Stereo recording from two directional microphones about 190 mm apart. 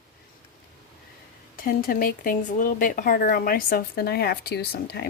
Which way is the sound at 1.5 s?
50° left (ahead or behind).